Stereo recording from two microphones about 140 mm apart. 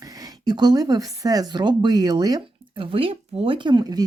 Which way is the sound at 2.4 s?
40° right (ahead or behind).